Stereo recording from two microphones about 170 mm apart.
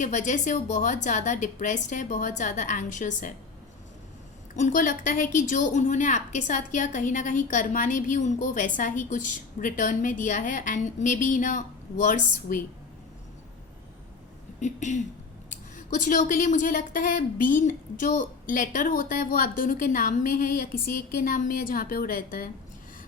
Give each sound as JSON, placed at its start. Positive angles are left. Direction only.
{"t": 0.0, "sound": "a woman's voice", "side_deg": 45}
{"t": 4.5, "sound": "a woman's voice", "side_deg": 50}
{"t": 14.6, "sound": "a woman's voice", "side_deg": 45}